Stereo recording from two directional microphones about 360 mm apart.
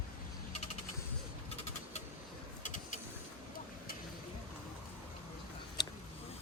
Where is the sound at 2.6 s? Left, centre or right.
Left.